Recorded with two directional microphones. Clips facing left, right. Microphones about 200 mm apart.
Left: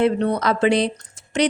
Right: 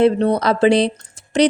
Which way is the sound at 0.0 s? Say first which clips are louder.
Right 4 dB; 35° right (ahead or behind).